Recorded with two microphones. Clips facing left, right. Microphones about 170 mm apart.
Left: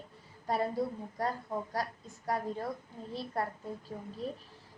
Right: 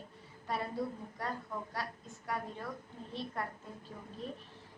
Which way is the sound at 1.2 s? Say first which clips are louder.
Left 6 dB; 35° left (ahead or behind).